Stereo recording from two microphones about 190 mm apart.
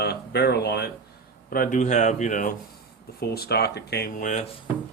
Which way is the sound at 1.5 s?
50° left (ahead or behind).